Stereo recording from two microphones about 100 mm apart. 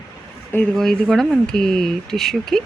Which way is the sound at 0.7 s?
5° left (ahead or behind).